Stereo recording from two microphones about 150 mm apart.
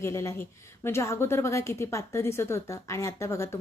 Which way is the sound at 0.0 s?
20° left (ahead or behind).